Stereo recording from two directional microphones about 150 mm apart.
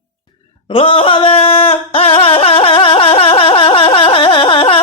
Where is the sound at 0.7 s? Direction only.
40° left (ahead or behind).